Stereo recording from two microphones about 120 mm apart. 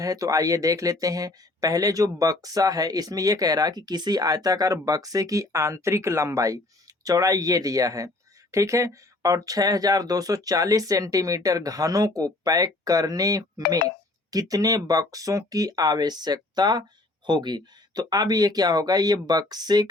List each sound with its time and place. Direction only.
0.0 s speech: 30° right (ahead or behind)